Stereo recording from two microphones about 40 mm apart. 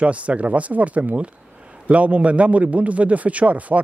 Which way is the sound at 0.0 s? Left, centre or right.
Right.